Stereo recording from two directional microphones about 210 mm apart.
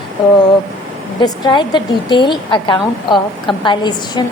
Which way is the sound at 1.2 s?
20° left (ahead or behind).